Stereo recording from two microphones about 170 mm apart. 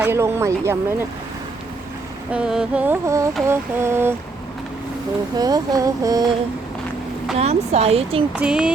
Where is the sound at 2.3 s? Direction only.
5° right (ahead or behind).